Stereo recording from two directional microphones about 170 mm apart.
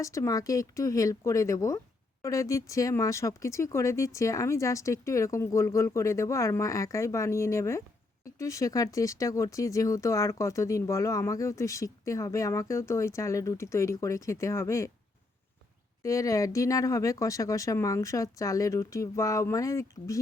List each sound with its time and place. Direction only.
0.0 s speech: 20° left (ahead or behind)
16.0 s speech: 20° left (ahead or behind)